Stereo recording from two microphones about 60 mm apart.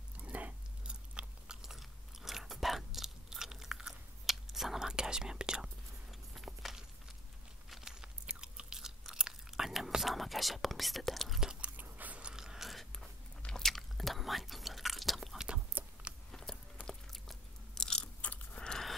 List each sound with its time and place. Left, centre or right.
0.2 s biting: right
6.3 s walk: centre
7.8 s chewing: centre
9.7 s whispering: centre
11.6 s biting: right
12.2 s biting: centre
13.4 s chewing: centre
15.8 s a sound: right
16.3 s biting: centre
18.2 s biting: left
18.6 s a sound: centre